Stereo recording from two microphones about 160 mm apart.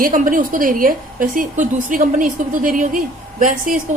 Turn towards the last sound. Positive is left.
turn(degrees=-60)  # may be behind; listen again after turning